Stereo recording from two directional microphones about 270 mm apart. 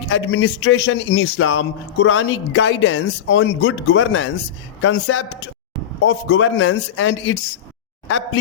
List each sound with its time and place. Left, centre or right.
0.1 s a man's voice: left